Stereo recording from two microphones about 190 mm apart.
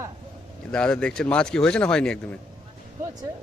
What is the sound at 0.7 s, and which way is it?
A man's voice, 5° left (ahead or behind).